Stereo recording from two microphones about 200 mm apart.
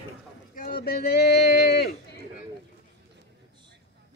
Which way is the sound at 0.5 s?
45° left (ahead or behind).